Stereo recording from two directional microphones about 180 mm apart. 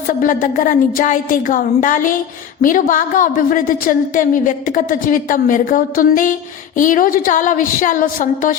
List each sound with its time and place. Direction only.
0.1 s a woman's voice: 50° left (ahead or behind)